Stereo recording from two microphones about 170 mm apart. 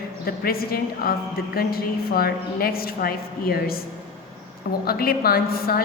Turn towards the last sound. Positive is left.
turn(degrees=60)  # may be behind; listen again after turning